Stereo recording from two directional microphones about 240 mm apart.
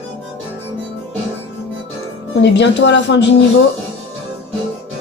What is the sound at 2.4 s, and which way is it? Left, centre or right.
Speech, left.